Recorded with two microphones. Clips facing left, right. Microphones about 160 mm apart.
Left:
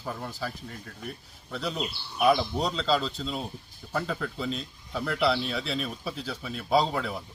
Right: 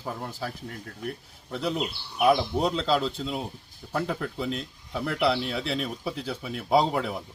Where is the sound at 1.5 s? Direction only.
20° right (ahead or behind).